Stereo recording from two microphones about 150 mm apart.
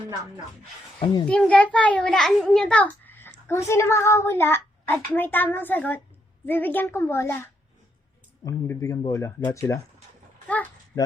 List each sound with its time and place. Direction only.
1.3 s a child's voice: 10° left (ahead or behind)
8.6 s speech: 15° left (ahead or behind)